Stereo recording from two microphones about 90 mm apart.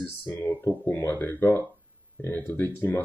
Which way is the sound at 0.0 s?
20° left (ahead or behind).